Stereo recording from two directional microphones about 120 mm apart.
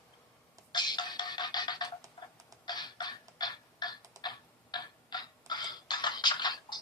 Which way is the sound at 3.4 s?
35° left (ahead or behind).